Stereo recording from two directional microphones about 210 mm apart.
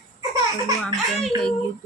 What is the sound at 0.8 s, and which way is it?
Speech, centre (ahead or behind).